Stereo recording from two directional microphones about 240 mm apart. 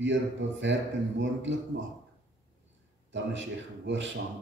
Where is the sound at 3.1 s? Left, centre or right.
Right.